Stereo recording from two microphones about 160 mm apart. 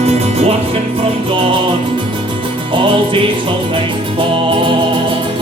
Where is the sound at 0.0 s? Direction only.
40° right (ahead or behind).